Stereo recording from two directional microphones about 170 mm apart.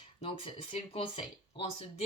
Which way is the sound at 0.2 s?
30° left (ahead or behind).